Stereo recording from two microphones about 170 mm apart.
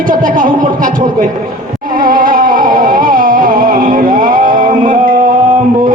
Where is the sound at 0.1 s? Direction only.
50° right (ahead or behind).